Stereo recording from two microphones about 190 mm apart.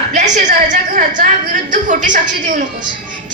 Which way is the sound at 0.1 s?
40° right (ahead or behind).